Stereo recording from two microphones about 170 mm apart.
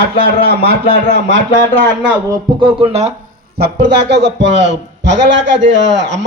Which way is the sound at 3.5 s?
70° right (ahead or behind).